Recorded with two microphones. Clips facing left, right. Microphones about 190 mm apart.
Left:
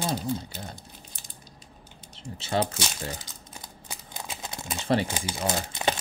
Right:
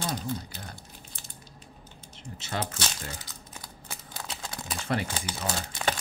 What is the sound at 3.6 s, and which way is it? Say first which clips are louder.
Crumpling: left 1 dB; 15° left (ahead or behind).